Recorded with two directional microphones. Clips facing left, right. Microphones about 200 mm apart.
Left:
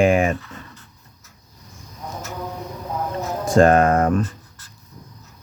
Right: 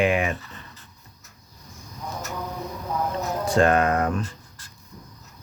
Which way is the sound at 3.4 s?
45° left (ahead or behind).